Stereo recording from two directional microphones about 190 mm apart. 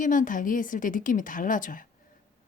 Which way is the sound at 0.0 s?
45° left (ahead or behind).